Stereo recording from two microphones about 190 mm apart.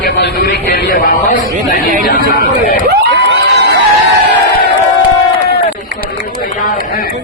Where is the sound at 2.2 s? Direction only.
45° right (ahead or behind).